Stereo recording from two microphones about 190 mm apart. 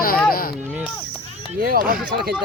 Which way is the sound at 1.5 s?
50° right (ahead or behind).